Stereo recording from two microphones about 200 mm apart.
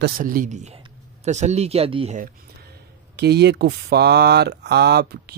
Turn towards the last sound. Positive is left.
turn(degrees=-55)  # may be behind; listen again after turning